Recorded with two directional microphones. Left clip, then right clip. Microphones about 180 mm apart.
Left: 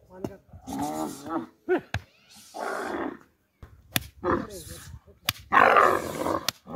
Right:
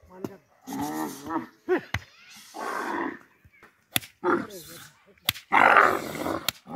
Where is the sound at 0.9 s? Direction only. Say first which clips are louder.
Even; 25° left (ahead or behind).